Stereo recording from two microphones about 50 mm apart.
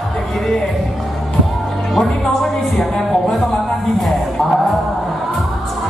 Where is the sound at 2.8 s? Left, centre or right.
Centre.